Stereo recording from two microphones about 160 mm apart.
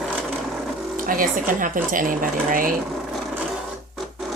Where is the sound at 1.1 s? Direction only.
60° right (ahead or behind).